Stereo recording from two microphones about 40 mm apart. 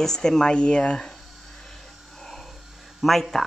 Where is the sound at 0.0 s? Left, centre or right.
Centre.